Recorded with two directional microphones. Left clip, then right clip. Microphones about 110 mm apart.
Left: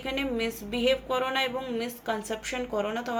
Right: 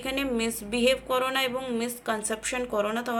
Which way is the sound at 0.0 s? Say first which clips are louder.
Right 1 dB; 35° right (ahead or behind).